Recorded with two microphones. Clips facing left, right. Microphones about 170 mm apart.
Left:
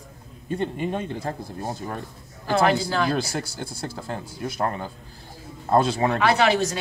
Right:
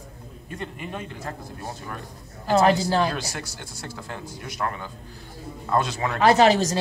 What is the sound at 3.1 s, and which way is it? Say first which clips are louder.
Speech: left 6 dB; 30° left (ahead or behind).